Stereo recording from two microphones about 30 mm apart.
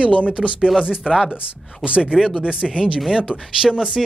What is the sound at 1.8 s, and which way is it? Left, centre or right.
Speech, right.